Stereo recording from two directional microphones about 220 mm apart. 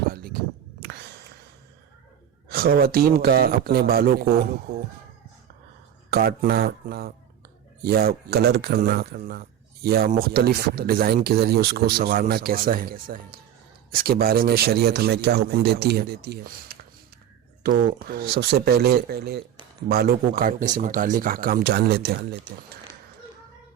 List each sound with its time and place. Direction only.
0.1 s a sound: 45° right (ahead or behind)
2.5 s speech: 45° right (ahead or behind)
6.1 s speech: 45° right (ahead or behind)